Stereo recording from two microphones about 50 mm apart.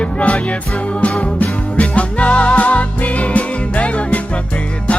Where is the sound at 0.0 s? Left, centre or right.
Left.